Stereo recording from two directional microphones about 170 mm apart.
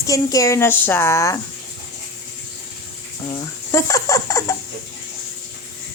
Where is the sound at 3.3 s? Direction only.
20° left (ahead or behind).